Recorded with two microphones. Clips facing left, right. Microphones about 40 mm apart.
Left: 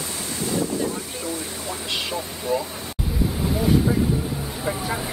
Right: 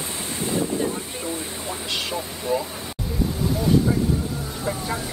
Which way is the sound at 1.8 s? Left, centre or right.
Centre.